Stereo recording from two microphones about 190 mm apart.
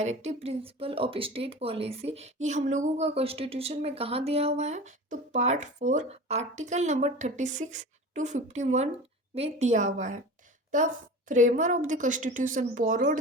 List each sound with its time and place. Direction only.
0.0 s speech: 35° right (ahead or behind)
11.3 s speech: 40° right (ahead or behind)